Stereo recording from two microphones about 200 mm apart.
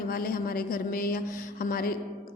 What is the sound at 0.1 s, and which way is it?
A woman's voice, 45° left (ahead or behind).